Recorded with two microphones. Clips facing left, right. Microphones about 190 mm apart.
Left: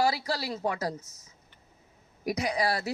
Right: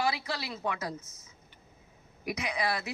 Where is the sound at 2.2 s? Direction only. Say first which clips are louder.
Left 4 dB; 40° left (ahead or behind).